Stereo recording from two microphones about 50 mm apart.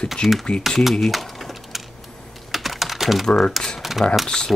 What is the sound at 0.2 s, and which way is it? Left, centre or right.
Speech, centre.